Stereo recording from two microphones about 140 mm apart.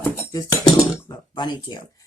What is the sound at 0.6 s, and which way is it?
Speech, 30° left (ahead or behind).